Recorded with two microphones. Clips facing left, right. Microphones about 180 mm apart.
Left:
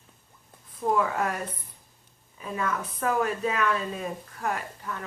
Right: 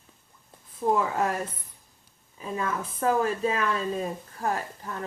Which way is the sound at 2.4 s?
25° right (ahead or behind).